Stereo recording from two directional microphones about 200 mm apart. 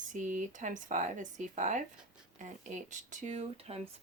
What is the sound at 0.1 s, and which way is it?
Speech, 40° right (ahead or behind).